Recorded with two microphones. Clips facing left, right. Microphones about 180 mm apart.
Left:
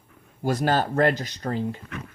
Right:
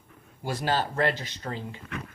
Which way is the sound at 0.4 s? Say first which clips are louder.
Left 5 dB; 50° left (ahead or behind).